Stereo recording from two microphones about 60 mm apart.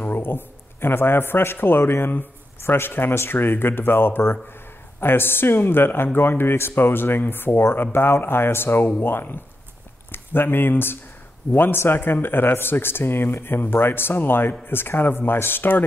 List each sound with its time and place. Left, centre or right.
0.0 s a man's voice: left